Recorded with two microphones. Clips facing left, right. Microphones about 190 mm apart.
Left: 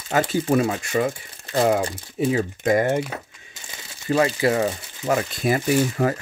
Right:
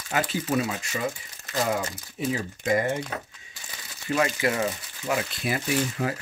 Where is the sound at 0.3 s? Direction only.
50° left (ahead or behind).